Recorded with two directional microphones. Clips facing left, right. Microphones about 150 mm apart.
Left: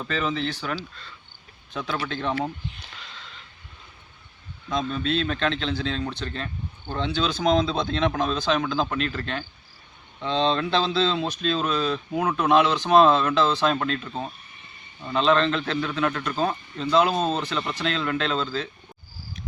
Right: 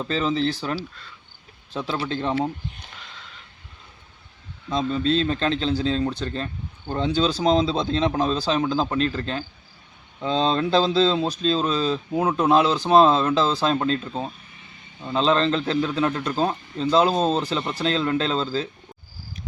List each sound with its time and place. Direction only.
0.0 s speech: 30° right (ahead or behind)
0.8 s speech: 10° right (ahead or behind)
1.7 s speech: 30° right (ahead or behind)
4.7 s speech: 25° right (ahead or behind)